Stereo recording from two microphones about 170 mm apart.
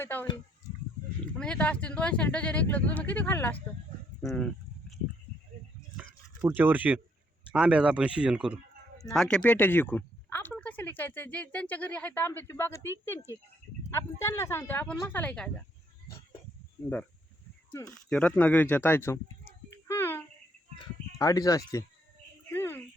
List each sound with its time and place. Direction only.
0.0 s speech: 10° left (ahead or behind)
6.0 s a sound: 10° right (ahead or behind)
7.5 s speech: 5° right (ahead or behind)
9.1 s speech: 5° left (ahead or behind)
13.9 s speech: 15° left (ahead or behind)
17.8 s speech: 5° left (ahead or behind)
19.9 s a sound: 15° left (ahead or behind)
21.2 s speech: 20° left (ahead or behind)
22.5 s a sound: 10° left (ahead or behind)